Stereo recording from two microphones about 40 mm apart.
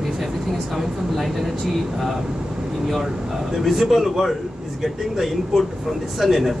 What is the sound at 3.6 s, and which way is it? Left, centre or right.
Speech, centre.